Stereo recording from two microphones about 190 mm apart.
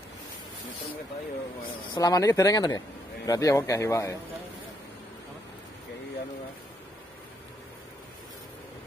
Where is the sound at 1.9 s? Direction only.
20° left (ahead or behind).